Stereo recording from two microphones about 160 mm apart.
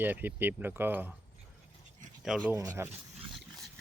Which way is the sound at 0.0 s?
10° right (ahead or behind).